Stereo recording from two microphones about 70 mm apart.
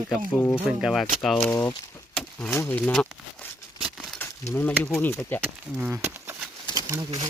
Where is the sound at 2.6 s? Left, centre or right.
Left.